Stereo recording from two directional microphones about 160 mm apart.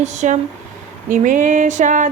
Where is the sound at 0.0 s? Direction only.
50° right (ahead or behind).